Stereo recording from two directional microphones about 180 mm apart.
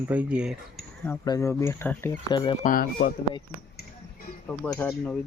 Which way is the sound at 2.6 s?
50° left (ahead or behind).